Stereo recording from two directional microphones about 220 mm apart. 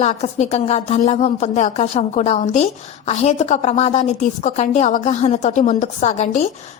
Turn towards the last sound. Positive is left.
turn(degrees=30)  # may be behind; listen again after turning